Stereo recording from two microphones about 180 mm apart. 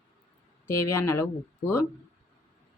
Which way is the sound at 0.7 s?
15° left (ahead or behind).